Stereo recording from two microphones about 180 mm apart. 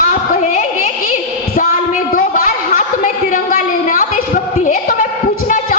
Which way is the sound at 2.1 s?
45° left (ahead or behind).